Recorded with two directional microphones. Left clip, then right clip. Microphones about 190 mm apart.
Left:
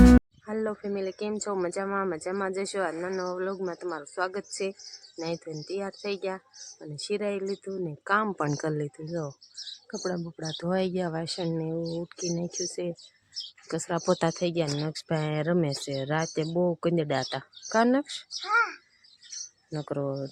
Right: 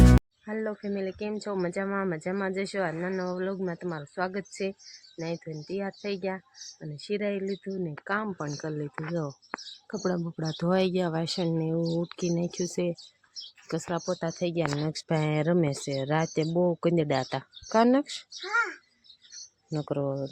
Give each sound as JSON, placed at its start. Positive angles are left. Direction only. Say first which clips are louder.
{"t": 0.4, "sound": "speech", "louder": "left 2 dB", "side_deg": 10}
{"t": 8.5, "sound": "speech", "louder": "left 4 dB", "side_deg": 35}
{"t": 9.9, "sound": "speech", "louder": "right 2 dB", "side_deg": -10}
{"t": 13.7, "sound": "speech", "louder": "even", "side_deg": 0}
{"t": 14.0, "sound": "speech", "louder": "left 5 dB", "side_deg": 40}
{"t": 14.3, "sound": "speech", "louder": "left 1 dB", "side_deg": 10}
{"t": 14.8, "sound": "speech", "louder": "right 1 dB", "side_deg": -5}
{"t": 18.3, "sound": "speech", "louder": "left 3 dB", "side_deg": 0}